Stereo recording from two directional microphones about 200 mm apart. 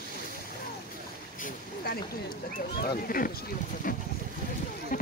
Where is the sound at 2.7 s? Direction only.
50° left (ahead or behind).